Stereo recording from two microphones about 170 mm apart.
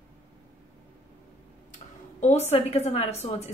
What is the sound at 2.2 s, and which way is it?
A woman's voice, 40° left (ahead or behind).